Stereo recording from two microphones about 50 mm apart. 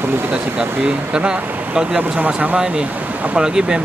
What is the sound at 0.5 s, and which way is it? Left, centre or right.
Speech, right.